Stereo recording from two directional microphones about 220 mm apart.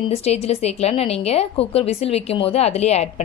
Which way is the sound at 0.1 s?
30° left (ahead or behind).